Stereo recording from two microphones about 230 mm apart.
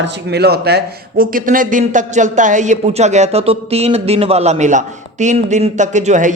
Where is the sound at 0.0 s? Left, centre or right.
Right.